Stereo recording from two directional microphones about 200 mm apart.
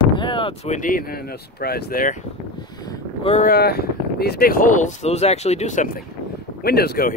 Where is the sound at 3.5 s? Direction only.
50° left (ahead or behind).